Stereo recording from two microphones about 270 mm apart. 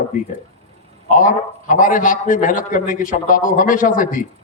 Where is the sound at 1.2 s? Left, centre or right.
Left.